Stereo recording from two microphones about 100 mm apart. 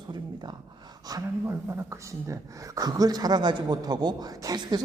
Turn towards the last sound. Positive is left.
turn(degrees=-40)  # may be behind; listen again after turning